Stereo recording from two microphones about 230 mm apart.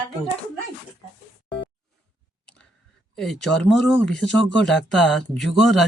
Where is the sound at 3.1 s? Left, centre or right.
Centre.